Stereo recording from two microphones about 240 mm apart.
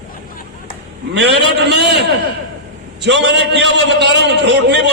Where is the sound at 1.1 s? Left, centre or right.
Right.